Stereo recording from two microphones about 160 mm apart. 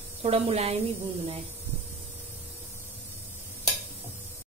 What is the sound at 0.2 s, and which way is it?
Speech, 35° right (ahead or behind).